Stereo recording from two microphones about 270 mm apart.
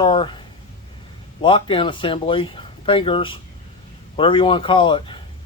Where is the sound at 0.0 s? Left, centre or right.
Centre.